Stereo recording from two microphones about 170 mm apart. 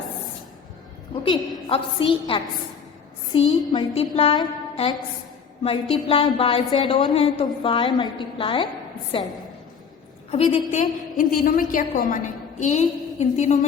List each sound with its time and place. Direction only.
1.1 s a woman's voice: 30° left (ahead or behind)
10.3 s a woman's voice: 35° left (ahead or behind)
10.7 s a woman's voice: 50° left (ahead or behind)